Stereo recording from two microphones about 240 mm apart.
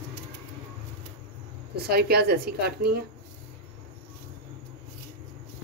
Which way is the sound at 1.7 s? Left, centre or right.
Right.